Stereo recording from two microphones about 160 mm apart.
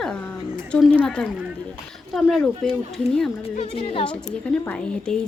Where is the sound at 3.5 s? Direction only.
40° left (ahead or behind).